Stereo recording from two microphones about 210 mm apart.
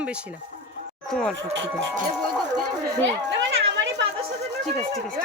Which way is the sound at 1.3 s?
60° right (ahead or behind).